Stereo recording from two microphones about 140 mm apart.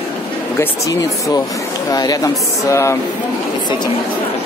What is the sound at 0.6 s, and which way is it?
Speech, 25° left (ahead or behind).